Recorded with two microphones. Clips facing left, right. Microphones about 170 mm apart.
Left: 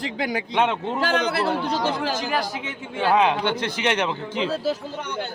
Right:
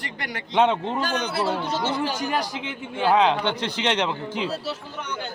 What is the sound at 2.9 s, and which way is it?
Speech, 10° right (ahead or behind).